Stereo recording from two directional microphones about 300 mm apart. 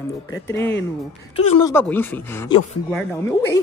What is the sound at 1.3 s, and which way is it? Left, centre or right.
Speech, centre.